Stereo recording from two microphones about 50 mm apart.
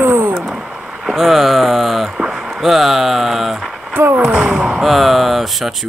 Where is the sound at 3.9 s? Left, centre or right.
Right.